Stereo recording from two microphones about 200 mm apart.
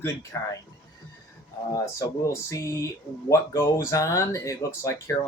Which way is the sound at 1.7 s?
15° left (ahead or behind).